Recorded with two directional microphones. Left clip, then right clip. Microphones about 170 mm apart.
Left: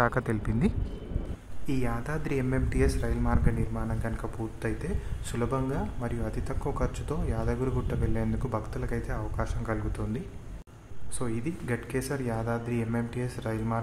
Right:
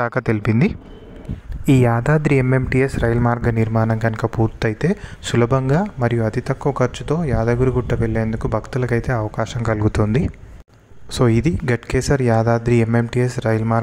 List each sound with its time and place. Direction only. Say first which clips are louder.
0.0 s speech: right 8 dB; 35° right (ahead or behind)
1.7 s speech: right 16 dB; 55° right (ahead or behind)